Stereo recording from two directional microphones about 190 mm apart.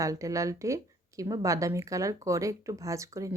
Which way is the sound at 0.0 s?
15° right (ahead or behind).